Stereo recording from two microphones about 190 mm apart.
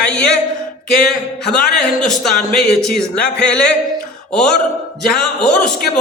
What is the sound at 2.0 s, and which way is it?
Speech, centre (ahead or behind).